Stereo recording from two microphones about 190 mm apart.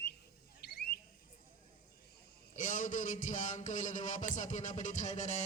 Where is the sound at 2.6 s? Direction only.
45° left (ahead or behind).